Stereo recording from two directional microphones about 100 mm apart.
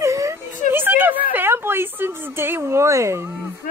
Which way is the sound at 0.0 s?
30° right (ahead or behind).